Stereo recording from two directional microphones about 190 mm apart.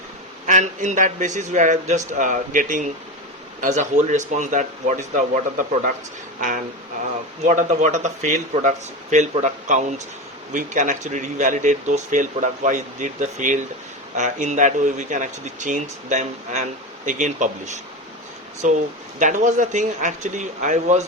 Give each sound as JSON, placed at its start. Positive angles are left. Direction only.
{"t": 0.4, "sound": "speech", "side_deg": -40}